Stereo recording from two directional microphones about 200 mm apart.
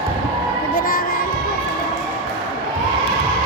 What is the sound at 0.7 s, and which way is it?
Music, 45° left (ahead or behind).